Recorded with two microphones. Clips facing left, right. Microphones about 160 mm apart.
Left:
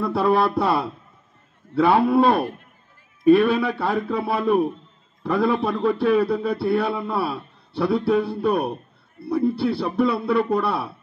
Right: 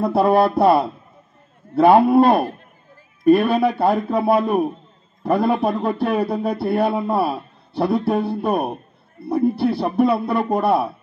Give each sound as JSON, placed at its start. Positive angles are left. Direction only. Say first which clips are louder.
{"t": 0.0, "sound": "a man's voice", "louder": "right 4 dB", "side_deg": -50}